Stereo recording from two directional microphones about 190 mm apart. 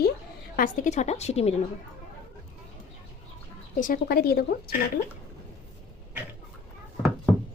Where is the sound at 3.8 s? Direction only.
50° left (ahead or behind).